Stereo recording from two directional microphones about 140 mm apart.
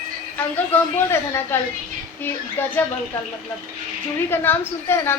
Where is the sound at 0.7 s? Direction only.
15° left (ahead or behind).